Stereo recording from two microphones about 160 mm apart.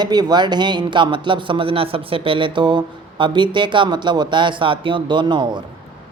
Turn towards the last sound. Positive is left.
turn(degrees=-30)  # may be behind; listen again after turning